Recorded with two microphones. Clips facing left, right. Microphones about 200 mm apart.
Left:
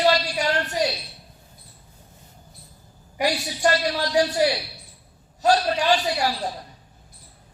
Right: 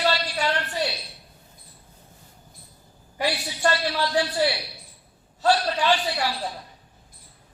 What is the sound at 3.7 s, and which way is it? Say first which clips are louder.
Speech: left 2 dB; 40° left (ahead or behind).